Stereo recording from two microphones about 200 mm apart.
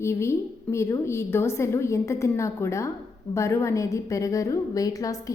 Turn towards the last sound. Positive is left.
turn(degrees=15)  # may be behind; listen again after turning